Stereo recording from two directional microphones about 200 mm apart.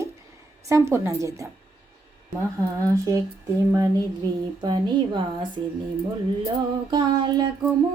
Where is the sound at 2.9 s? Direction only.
15° right (ahead or behind).